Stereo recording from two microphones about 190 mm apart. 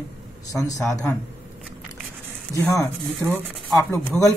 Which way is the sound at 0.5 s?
15° left (ahead or behind).